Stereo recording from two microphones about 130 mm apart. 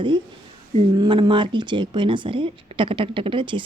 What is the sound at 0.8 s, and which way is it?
A woman's voice, 35° right (ahead or behind).